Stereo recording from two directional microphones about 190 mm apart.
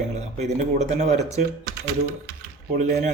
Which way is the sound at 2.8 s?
40° right (ahead or behind).